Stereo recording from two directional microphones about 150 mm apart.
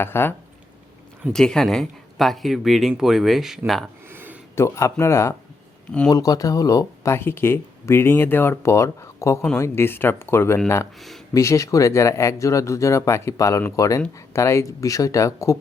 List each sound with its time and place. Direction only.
0.0 s speech: 15° left (ahead or behind)
1.3 s speech: 5° left (ahead or behind)
4.1 s a sound: 15° right (ahead or behind)
4.5 s speech: 20° left (ahead or behind)